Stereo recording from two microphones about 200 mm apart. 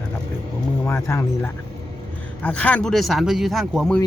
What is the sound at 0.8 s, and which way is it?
Speech, 10° left (ahead or behind).